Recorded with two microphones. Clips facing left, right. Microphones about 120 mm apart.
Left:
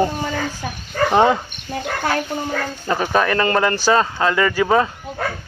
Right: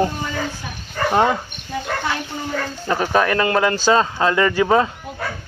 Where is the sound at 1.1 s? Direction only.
5° left (ahead or behind).